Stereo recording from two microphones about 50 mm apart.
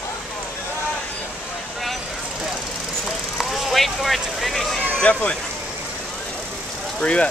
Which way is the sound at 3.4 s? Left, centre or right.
Centre.